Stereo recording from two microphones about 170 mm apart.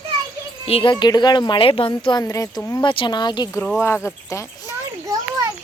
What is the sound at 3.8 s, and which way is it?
Speech, 15° left (ahead or behind).